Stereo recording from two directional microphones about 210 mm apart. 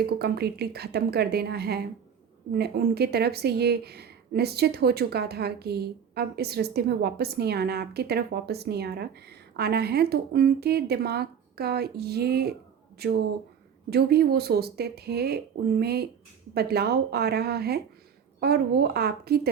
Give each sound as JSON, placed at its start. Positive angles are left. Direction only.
{"t": 0.0, "sound": "speech", "side_deg": -50}